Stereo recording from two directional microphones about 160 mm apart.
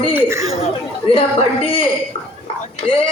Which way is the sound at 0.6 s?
35° left (ahead or behind).